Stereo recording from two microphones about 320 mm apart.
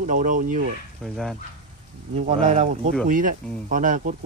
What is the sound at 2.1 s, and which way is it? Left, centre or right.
Speech, right.